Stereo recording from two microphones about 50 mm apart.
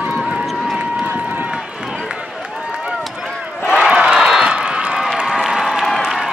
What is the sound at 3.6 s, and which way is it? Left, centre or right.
Crowd, centre.